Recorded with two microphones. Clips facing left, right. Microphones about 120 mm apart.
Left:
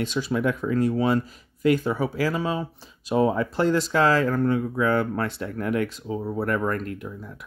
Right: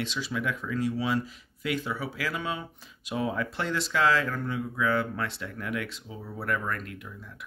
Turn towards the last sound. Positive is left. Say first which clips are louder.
# left 7 dB
turn(degrees=40)  # may be behind; listen again after turning